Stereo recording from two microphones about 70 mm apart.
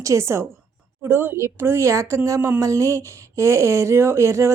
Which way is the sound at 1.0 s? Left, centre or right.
Right.